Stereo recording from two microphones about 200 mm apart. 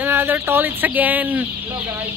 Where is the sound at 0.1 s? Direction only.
10° right (ahead or behind).